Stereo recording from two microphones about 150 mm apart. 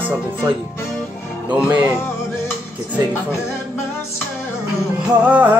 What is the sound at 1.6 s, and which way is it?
Music, 10° right (ahead or behind).